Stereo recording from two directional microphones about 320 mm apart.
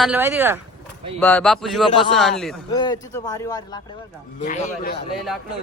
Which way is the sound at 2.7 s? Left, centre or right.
Centre.